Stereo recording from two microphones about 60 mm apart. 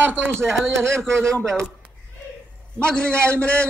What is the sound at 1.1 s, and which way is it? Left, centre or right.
Speech, right.